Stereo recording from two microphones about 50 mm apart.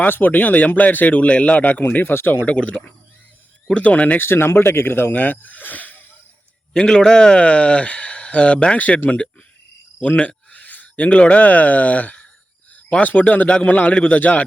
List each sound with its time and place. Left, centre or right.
0.0 s speech: left
2.5 s speech: left
4.2 s speech: left
6.7 s speech: centre
10.0 s speech: left